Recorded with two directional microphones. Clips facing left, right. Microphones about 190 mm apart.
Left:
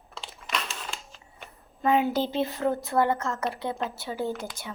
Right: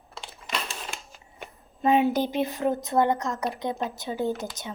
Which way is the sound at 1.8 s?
20° right (ahead or behind).